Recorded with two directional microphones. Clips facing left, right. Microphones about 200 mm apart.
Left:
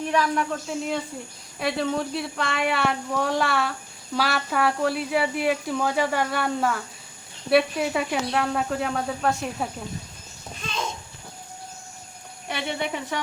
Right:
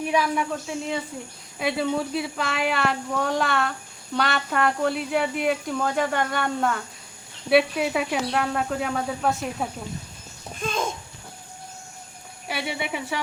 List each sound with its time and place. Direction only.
0.0 s speech: 10° right (ahead or behind)
10.6 s babbling: 50° right (ahead or behind)
12.5 s speech: 5° right (ahead or behind)